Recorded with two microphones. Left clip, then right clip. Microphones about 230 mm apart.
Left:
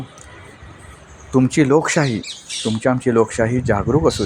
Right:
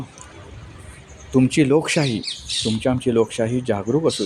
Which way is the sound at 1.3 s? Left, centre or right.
Centre.